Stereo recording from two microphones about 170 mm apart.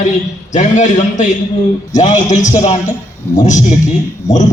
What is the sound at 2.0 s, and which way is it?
A man's voice, 45° left (ahead or behind).